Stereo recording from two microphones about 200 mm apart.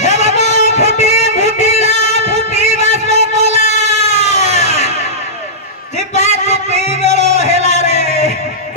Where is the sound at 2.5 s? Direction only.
35° left (ahead or behind).